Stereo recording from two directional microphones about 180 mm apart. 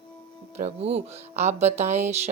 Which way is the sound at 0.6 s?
35° right (ahead or behind).